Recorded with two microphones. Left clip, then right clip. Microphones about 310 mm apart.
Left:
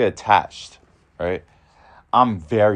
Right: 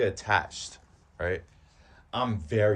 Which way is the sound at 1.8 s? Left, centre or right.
Centre.